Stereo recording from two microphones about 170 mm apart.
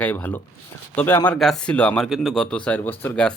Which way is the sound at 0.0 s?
10° left (ahead or behind).